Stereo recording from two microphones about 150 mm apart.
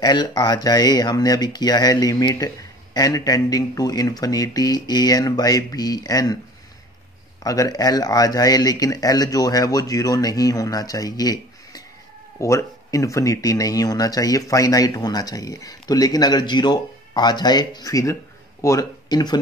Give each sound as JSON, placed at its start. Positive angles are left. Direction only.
{"t": 0.0, "sound": "speech", "side_deg": 30}
{"t": 7.4, "sound": "speech", "side_deg": 25}